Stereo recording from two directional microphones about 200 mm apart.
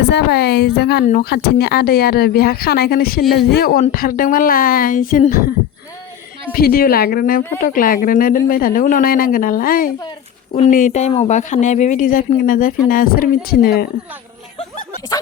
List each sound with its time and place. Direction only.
0.0 s a woman's voice: 55° left (ahead or behind)
1.0 s speech: 45° left (ahead or behind)
6.5 s speech: 50° left (ahead or behind)
14.6 s a sound: 45° left (ahead or behind)